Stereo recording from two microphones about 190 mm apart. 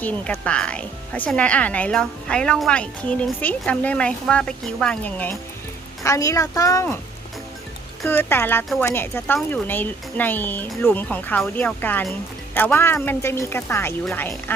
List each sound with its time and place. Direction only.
0.0 s speech: 5° left (ahead or behind)
8.0 s speech: 10° left (ahead or behind)